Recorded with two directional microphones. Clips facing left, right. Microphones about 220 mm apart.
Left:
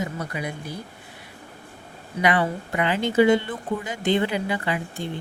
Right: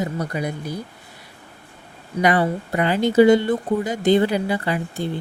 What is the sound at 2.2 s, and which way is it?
Speech, 40° right (ahead or behind).